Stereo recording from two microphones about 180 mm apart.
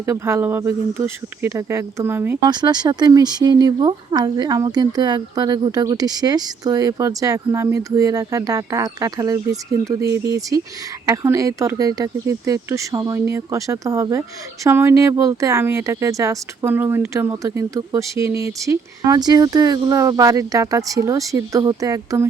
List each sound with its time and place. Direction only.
0.0 s speech: 15° right (ahead or behind)
2.5 s speech: 25° right (ahead or behind)